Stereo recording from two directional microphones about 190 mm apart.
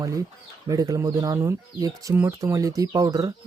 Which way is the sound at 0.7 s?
20° right (ahead or behind).